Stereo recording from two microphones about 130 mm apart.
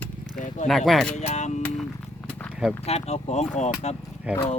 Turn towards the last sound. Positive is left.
turn(degrees=-10)  # may be behind; listen again after turning